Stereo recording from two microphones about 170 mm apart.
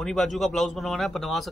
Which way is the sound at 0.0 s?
Centre (ahead or behind).